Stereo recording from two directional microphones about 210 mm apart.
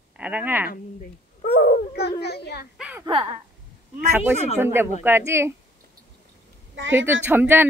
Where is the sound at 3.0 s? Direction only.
25° right (ahead or behind).